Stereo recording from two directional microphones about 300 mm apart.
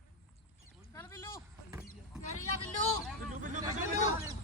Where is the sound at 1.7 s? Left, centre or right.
Centre.